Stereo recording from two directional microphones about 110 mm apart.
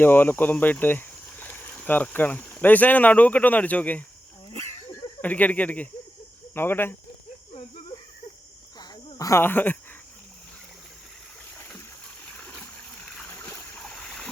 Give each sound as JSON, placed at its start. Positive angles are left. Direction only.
{"t": 0.0, "sound": "speech", "side_deg": 20}
{"t": 5.2, "sound": "speech", "side_deg": 15}
{"t": 7.9, "sound": "a sound", "side_deg": 35}
{"t": 9.1, "sound": "speech", "side_deg": 30}
{"t": 9.4, "sound": "speech", "side_deg": 15}
{"t": 12.4, "sound": "water", "side_deg": 10}
{"t": 13.8, "sound": "a sound", "side_deg": 5}